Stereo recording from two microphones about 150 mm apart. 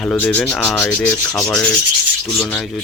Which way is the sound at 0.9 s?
20° left (ahead or behind).